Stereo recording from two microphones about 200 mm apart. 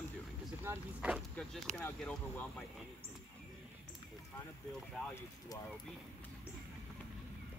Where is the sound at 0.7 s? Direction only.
5° right (ahead or behind).